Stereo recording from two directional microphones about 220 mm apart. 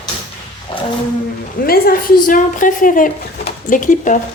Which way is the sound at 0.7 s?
25° left (ahead or behind).